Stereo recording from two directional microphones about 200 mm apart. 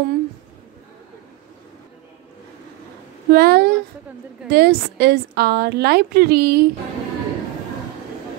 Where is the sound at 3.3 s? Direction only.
50° right (ahead or behind).